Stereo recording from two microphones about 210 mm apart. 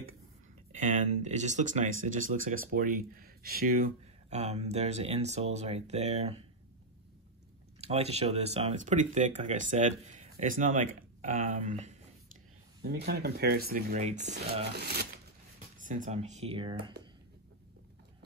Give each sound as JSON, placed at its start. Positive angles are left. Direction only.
{"t": 0.7, "sound": "speech", "side_deg": -35}
{"t": 7.8, "sound": "speech", "side_deg": -30}
{"t": 12.8, "sound": "speech", "side_deg": -50}
{"t": 14.1, "sound": "speech", "side_deg": -55}
{"t": 15.8, "sound": "speech", "side_deg": -35}